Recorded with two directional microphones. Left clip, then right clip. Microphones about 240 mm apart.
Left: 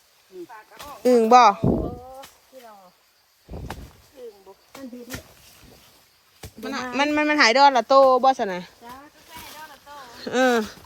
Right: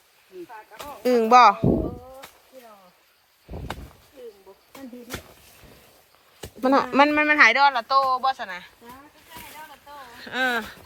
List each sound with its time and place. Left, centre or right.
1.0 s a man's voice: centre
3.5 s a sound: right
6.6 s a man's voice: centre; by 8.7 s left
10.2 s a man's voice: left